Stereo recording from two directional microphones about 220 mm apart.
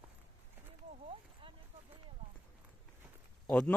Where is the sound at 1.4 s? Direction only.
25° right (ahead or behind).